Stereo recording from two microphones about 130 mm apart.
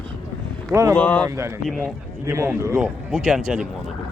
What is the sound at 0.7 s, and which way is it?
Speech, 20° right (ahead or behind).